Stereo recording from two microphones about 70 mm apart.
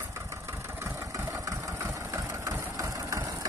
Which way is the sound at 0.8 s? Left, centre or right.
Right.